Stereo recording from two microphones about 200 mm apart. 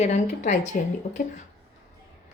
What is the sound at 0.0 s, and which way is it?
A woman's voice, 35° left (ahead or behind).